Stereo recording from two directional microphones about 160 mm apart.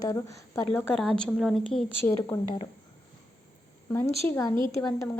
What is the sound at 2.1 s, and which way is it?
Speech, 20° left (ahead or behind).